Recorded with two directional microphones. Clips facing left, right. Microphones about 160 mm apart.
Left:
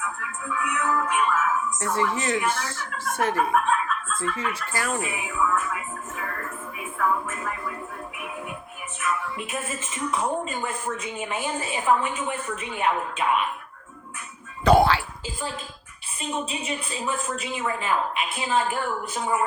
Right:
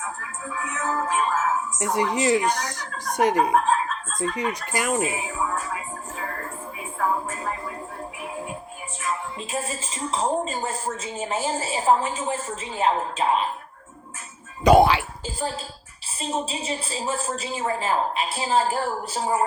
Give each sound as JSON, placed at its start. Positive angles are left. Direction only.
{"t": 0.0, "sound": "speech", "side_deg": -40}
{"t": 1.8, "sound": "speech", "side_deg": -20}
{"t": 2.4, "sound": "speech", "side_deg": -40}
{"t": 3.2, "sound": "speech", "side_deg": -20}
{"t": 3.5, "sound": "chicken", "side_deg": -35}
{"t": 4.6, "sound": "speech", "side_deg": -20}
{"t": 5.0, "sound": "music", "side_deg": -35}
{"t": 7.0, "sound": "speech", "side_deg": -35}
{"t": 9.0, "sound": "speech", "side_deg": -30}
{"t": 14.6, "sound": "speech", "side_deg": -15}
{"t": 16.2, "sound": "speech", "side_deg": -35}